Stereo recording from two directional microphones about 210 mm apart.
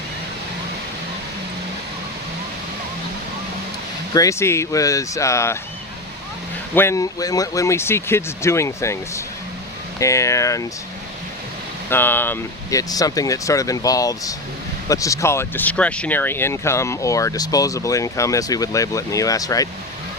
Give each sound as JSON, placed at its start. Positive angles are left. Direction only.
{"t": 4.1, "sound": "speech", "side_deg": 15}
{"t": 6.7, "sound": "speech", "side_deg": 15}
{"t": 11.9, "sound": "speech", "side_deg": 10}